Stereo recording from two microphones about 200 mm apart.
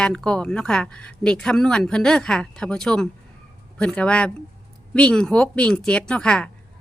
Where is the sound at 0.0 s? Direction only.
5° left (ahead or behind).